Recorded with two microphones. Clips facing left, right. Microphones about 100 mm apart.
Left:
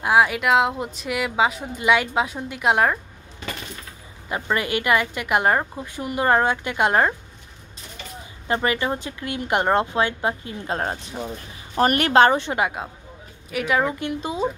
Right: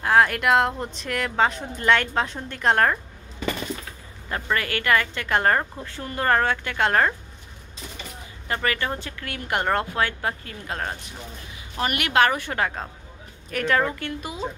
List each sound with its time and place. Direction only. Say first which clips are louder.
0.0 s speech: left 1 dB; 10° left (ahead or behind)
4.3 s speech: left 2 dB; 20° left (ahead or behind)
8.5 s speech: left 4 dB; 20° left (ahead or behind)
11.7 s speech: left 6 dB; 40° left (ahead or behind); by 14.4 s 20° left (ahead or behind)